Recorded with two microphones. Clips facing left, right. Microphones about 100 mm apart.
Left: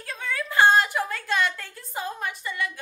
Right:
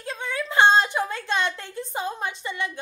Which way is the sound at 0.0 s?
20° right (ahead or behind).